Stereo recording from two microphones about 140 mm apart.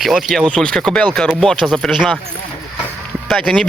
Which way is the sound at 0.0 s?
Centre (ahead or behind).